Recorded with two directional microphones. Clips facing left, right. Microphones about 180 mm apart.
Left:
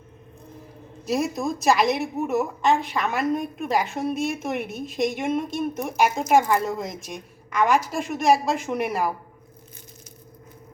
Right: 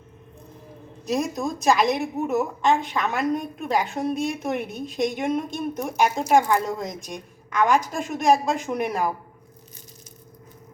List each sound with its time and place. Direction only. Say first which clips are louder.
1.0 s a woman's voice: left 1 dB; 5° left (ahead or behind)